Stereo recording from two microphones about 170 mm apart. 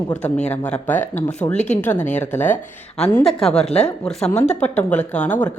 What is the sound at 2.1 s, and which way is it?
A woman's voice, 10° left (ahead or behind).